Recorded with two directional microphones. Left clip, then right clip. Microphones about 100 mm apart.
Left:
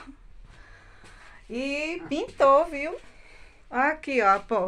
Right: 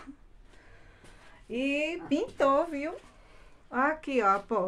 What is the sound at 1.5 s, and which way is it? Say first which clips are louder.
Speech: left 1 dB; 30° right (ahead or behind).